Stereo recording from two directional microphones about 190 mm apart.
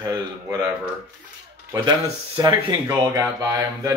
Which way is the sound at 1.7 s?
15° right (ahead or behind).